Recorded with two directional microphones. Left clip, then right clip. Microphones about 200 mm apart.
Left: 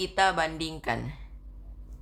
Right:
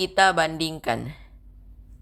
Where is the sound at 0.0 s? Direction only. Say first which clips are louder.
Right 6 dB; 40° right (ahead or behind).